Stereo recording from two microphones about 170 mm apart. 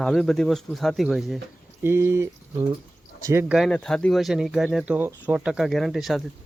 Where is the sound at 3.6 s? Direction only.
5° left (ahead or behind).